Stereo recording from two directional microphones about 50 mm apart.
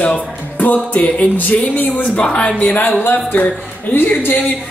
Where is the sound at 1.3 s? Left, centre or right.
Left.